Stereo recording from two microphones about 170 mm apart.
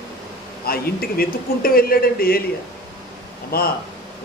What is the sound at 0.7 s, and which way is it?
A man's voice, 60° left (ahead or behind).